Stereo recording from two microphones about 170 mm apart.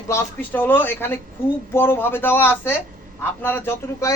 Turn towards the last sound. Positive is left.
turn(degrees=15)  # may be behind; listen again after turning